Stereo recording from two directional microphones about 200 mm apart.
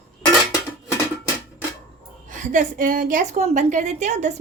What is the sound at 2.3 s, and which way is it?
A woman's voice, 40° right (ahead or behind).